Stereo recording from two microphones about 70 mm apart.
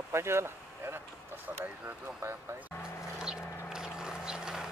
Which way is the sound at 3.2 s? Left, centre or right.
Centre.